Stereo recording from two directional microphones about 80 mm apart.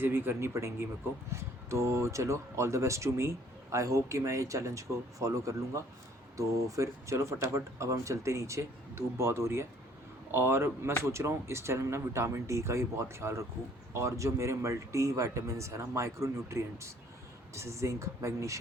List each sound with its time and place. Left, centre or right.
0.0 s speech: right